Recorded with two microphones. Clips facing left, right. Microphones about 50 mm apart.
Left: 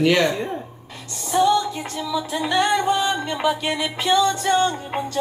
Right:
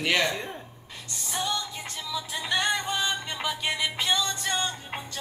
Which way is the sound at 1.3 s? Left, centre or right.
Centre.